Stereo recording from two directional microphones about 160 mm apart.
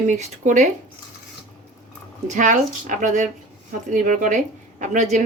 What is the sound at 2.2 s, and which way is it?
Speech, 50° right (ahead or behind).